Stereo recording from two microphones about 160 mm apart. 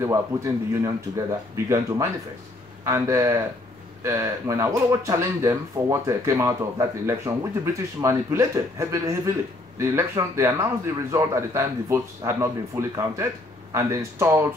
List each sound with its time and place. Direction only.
0.0 s a man's voice: 20° right (ahead or behind)